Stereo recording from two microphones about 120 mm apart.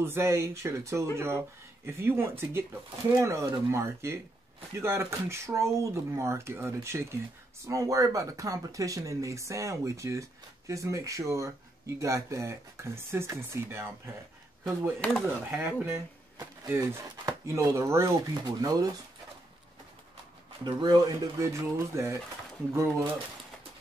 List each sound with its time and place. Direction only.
0.0 s speech: 20° right (ahead or behind)
14.6 s speech: 5° left (ahead or behind)
15.5 s speech: 20° right (ahead or behind)
17.3 s speech: 25° right (ahead or behind)
20.6 s speech: 35° right (ahead or behind)